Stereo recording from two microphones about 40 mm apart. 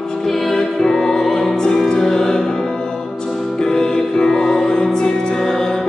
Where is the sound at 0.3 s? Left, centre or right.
Centre.